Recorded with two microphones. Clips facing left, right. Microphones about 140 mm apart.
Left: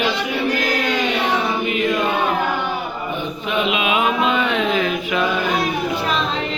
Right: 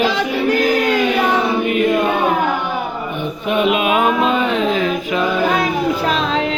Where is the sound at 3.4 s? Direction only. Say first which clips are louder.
Right 5 dB; 50° right (ahead or behind); by 5.2 s 35° right (ahead or behind).